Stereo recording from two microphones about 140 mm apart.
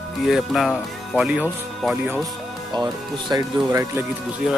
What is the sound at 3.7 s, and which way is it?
Speech, 20° right (ahead or behind).